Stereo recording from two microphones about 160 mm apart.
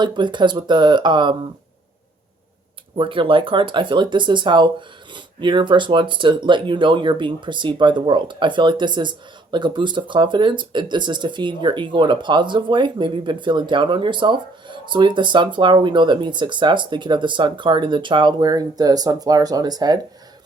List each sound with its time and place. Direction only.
0.0 s speech: 30° right (ahead or behind)
3.0 s speech: 30° right (ahead or behind)